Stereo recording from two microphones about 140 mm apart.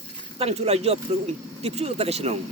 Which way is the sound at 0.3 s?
45° right (ahead or behind).